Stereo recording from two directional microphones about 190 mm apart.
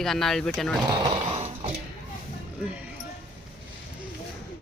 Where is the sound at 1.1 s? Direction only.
30° right (ahead or behind).